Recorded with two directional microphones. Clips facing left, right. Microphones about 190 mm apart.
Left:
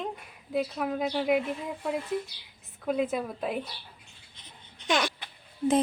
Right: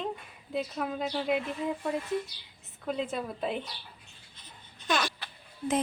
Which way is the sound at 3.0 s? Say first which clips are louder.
Left 2 dB; 10° left (ahead or behind).